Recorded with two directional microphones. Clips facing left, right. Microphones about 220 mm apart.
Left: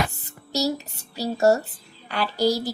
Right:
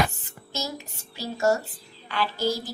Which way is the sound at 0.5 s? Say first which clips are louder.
Left 9 dB; 40° left (ahead or behind).